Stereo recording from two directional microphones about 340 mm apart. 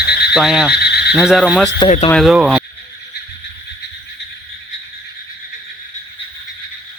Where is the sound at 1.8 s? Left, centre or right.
Centre.